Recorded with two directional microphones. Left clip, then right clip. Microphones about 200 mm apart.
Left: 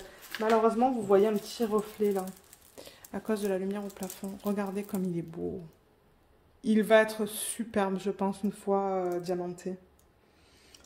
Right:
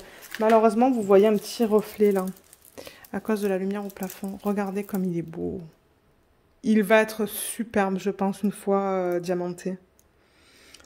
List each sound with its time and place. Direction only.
0.4 s speech: 70° right (ahead or behind)
2.7 s speech: 40° right (ahead or behind)
6.6 s speech: 35° right (ahead or behind)